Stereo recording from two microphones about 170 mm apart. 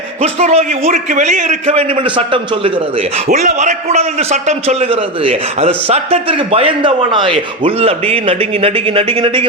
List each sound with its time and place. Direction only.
0.2 s a man's voice: 40° right (ahead or behind)
3.2 s a man's voice: 50° right (ahead or behind); by 9.5 s 30° right (ahead or behind)